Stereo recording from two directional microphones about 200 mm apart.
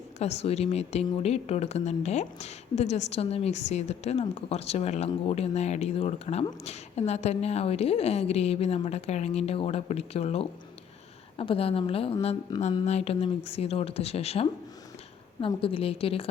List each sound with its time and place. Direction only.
0.2 s a woman's voice: 30° left (ahead or behind)